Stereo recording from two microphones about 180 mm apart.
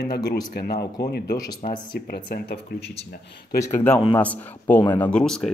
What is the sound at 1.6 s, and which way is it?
Speech, 45° left (ahead or behind).